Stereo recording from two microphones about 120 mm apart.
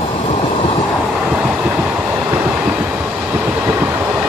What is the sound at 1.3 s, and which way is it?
Train, 10° right (ahead or behind).